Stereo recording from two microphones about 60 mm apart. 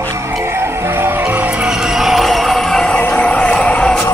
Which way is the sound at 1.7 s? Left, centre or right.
Centre.